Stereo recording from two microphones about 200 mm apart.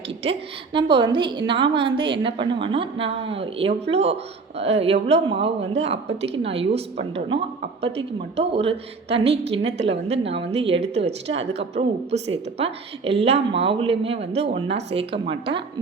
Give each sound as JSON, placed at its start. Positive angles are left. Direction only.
{"t": 0.2, "sound": "a woman's voice", "side_deg": -25}